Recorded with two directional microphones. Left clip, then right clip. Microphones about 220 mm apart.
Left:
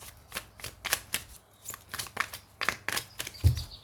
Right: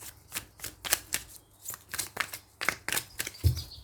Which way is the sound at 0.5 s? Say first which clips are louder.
Even; 20° right (ahead or behind).